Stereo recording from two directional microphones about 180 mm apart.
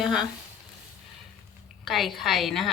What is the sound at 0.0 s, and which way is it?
Speech, 5° right (ahead or behind).